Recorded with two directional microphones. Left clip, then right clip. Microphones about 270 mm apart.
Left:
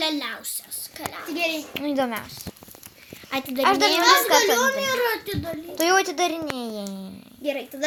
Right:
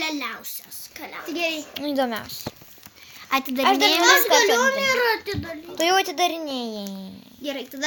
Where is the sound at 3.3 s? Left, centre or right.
Right.